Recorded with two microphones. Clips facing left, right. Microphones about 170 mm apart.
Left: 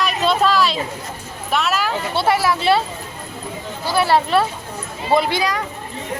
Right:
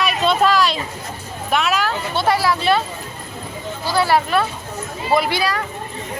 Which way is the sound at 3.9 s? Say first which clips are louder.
Left 1 dB; 25° left (ahead or behind).